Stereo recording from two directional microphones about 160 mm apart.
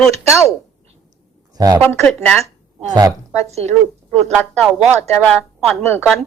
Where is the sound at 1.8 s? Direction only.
10° left (ahead or behind).